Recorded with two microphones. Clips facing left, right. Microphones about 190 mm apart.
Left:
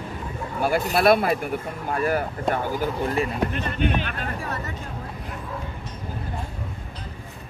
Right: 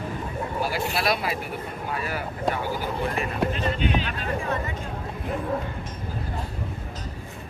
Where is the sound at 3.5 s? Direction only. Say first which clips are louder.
Left 1 dB; 55° left (ahead or behind).